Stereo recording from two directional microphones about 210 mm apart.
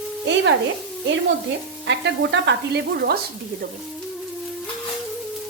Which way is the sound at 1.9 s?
55° right (ahead or behind).